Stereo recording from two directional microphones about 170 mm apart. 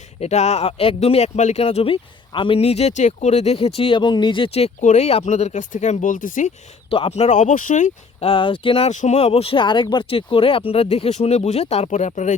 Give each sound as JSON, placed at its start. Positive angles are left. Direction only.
{"t": 0.2, "sound": "speech", "side_deg": 40}
{"t": 6.9, "sound": "speech", "side_deg": 35}
{"t": 8.3, "sound": "speech", "side_deg": 30}